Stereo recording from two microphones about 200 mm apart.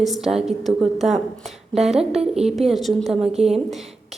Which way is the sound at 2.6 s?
Centre (ahead or behind).